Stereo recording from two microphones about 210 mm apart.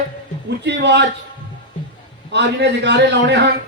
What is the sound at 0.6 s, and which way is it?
Speech, 55° right (ahead or behind).